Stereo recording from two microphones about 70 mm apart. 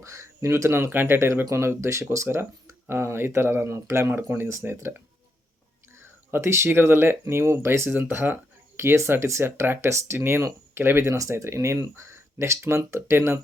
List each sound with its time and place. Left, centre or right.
0.0 s speech: right
5.9 s a sound: right
6.7 s speech: right
7.9 s speech: right
11.0 s speech: right